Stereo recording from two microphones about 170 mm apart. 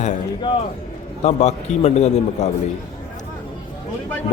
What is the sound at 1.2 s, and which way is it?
A man's voice, 40° left (ahead or behind).